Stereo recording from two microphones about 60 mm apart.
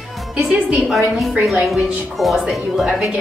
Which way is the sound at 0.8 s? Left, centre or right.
Centre.